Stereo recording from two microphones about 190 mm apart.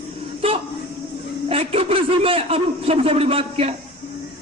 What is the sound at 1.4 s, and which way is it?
A man's voice, 30° right (ahead or behind).